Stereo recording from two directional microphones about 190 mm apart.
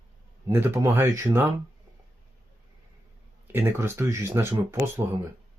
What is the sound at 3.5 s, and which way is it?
Speech, 10° right (ahead or behind).